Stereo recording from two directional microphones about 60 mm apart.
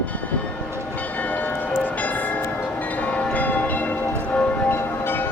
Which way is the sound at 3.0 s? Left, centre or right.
Left.